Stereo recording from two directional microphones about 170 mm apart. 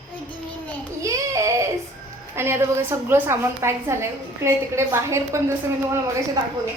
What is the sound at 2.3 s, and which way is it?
A woman's voice, 15° right (ahead or behind).